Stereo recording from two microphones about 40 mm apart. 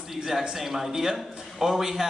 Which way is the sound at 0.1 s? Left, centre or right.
Centre.